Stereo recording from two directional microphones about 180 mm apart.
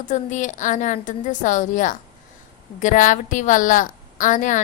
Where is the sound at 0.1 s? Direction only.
45° left (ahead or behind).